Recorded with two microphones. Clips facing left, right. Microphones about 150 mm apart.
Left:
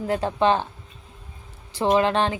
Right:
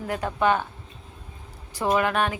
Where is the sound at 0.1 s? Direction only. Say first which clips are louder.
Left 2 dB; 30° left (ahead or behind).